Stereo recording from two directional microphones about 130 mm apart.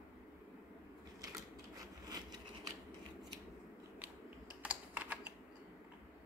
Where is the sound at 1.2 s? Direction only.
30° right (ahead or behind).